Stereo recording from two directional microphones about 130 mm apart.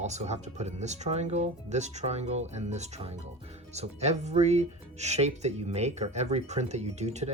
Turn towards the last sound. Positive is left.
turn(degrees=-60)  # may be behind; listen again after turning